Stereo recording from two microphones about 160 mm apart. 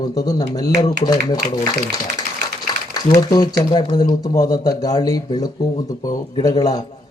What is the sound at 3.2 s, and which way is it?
A man's voice, 25° left (ahead or behind).